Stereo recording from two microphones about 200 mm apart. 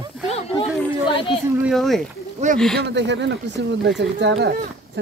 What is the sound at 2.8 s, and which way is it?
Speech, 60° right (ahead or behind).